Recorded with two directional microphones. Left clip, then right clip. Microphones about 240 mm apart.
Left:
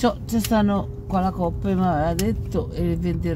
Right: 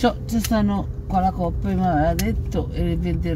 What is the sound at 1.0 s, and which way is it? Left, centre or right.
Speech, centre.